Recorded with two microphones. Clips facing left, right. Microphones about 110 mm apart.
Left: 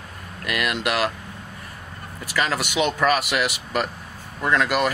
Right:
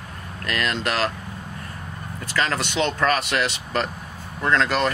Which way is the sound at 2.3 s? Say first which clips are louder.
Even; 10° left (ahead or behind).